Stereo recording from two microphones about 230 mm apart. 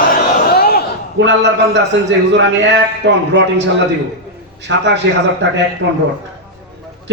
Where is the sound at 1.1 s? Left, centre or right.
Right.